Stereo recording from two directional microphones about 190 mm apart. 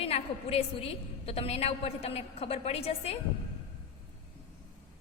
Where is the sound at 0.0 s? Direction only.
30° left (ahead or behind).